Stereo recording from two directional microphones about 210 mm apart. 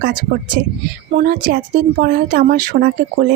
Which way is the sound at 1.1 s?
40° right (ahead or behind).